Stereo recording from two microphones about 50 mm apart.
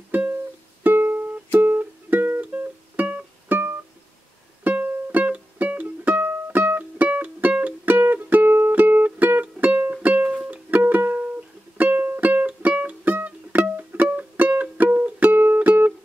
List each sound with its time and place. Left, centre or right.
0.1 s music: right
4.6 s music: right
10.8 s music: right